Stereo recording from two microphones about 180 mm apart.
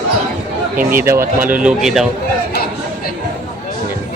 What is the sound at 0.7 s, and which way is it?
Speech, 55° right (ahead or behind).